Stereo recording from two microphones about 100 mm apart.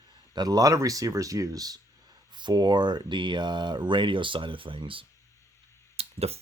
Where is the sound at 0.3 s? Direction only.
40° right (ahead or behind); by 5.0 s 60° right (ahead or behind).